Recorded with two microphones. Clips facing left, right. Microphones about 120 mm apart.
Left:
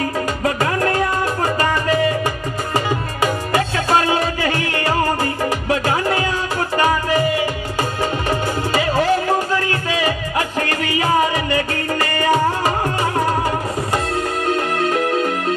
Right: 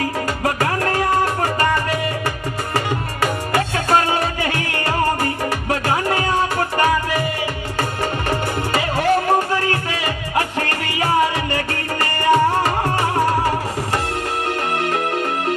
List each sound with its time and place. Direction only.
2.7 s music: 15° left (ahead or behind)
3.8 s music: 55° right (ahead or behind)
9.0 s music: 60° right (ahead or behind)
11.7 s music: 15° left (ahead or behind)
14.8 s music: 60° right (ahead or behind)